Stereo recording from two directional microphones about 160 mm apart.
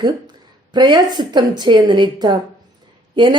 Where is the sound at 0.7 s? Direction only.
30° right (ahead or behind).